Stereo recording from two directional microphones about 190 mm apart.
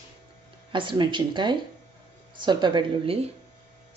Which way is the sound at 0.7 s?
25° right (ahead or behind).